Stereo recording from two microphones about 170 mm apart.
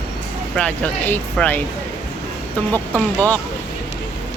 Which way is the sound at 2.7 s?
10° left (ahead or behind).